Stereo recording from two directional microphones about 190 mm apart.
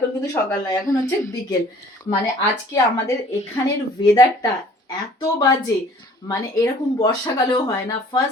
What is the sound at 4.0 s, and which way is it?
Speech, 20° left (ahead or behind).